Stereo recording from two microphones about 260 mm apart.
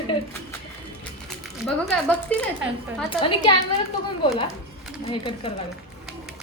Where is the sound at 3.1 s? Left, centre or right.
Centre.